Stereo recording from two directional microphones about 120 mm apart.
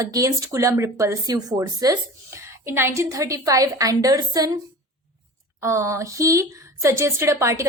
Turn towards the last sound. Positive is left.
turn(degrees=-25)  # may be behind; listen again after turning